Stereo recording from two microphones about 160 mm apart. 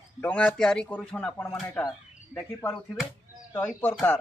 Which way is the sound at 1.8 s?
5° left (ahead or behind).